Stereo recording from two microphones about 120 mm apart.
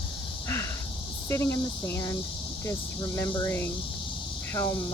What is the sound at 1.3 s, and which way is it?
Speech, 25° left (ahead or behind).